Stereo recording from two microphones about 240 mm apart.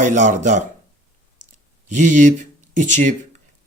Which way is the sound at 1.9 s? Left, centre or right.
Right.